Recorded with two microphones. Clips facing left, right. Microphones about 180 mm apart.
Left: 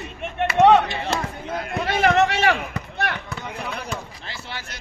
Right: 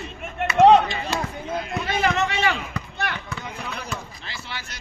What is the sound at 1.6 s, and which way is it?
Speech, 60° left (ahead or behind).